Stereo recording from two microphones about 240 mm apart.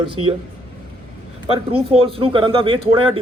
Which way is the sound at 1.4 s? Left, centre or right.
Right.